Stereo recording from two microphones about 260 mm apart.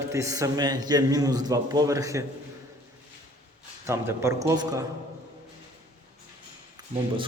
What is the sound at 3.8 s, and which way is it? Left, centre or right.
A man's voice, centre.